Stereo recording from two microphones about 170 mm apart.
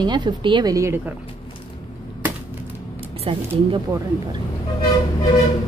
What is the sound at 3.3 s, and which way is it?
Speech, 35° right (ahead or behind).